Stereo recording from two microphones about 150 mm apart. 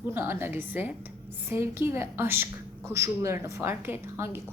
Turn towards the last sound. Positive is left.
turn(degrees=-15)  # may be behind; listen again after turning